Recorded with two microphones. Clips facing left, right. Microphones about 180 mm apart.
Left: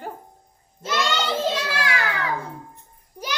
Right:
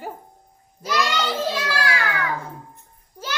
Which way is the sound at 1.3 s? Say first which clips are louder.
Left 1 dB; 20° left (ahead or behind).